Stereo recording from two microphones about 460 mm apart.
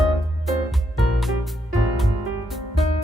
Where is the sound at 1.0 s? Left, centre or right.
Centre.